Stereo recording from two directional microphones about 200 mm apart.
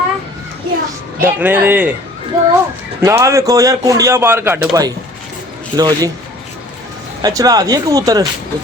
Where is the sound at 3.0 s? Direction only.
15° right (ahead or behind).